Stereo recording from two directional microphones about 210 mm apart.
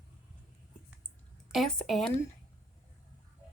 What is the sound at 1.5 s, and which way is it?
Speech, centre (ahead or behind).